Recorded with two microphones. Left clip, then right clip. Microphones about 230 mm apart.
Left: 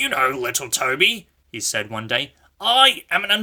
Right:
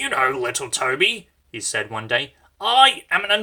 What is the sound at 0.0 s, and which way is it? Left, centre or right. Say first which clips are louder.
Speech: even; left.